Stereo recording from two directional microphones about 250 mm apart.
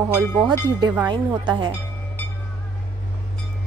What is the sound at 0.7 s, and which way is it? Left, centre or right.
A woman's voice, centre.